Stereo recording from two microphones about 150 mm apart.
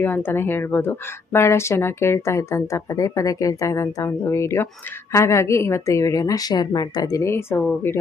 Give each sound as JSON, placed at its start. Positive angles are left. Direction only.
{"t": 0.0, "sound": "a woman's voice", "side_deg": 15}